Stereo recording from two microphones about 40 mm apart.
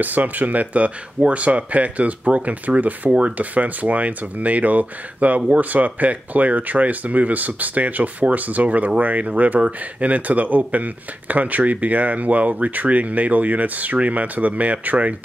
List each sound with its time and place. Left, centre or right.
0.0 s speech: right
3.1 s speech: right
3.3 s speech: right